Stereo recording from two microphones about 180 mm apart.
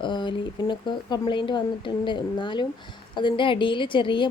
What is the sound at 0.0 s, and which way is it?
Speech, 25° left (ahead or behind).